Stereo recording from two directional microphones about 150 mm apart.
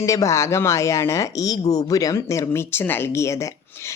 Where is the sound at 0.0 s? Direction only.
20° left (ahead or behind).